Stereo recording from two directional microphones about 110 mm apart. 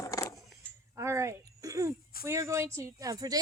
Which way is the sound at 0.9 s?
25° right (ahead or behind).